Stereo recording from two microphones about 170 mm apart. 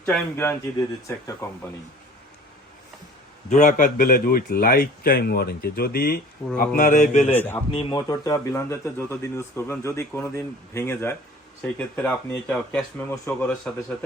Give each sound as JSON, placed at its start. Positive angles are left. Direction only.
{"t": 0.0, "sound": "a man's voice", "side_deg": 0}
{"t": 0.3, "sound": "speech", "side_deg": 15}
{"t": 3.5, "sound": "a man's voice", "side_deg": 45}
{"t": 6.7, "sound": "a man's voice", "side_deg": 45}
{"t": 7.7, "sound": "speech", "side_deg": 30}